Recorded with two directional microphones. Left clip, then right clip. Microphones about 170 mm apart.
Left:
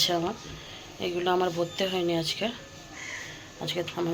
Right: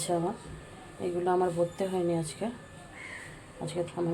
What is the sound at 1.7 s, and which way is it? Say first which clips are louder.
Speech: left 3 dB; 5° left (ahead or behind).